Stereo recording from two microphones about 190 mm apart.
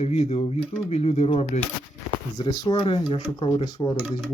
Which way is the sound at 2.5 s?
20° left (ahead or behind).